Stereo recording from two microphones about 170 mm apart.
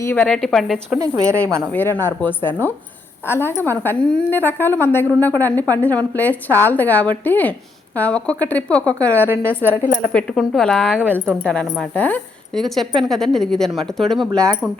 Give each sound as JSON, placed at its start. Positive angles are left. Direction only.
{"t": 0.0, "sound": "a woman's voice", "side_deg": 10}
{"t": 0.9, "sound": "speech", "side_deg": -20}
{"t": 1.6, "sound": "a woman's voice", "side_deg": 10}
{"t": 11.4, "sound": "a woman's voice", "side_deg": 5}